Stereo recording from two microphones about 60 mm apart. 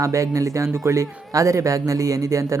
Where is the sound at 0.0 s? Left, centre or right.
Right.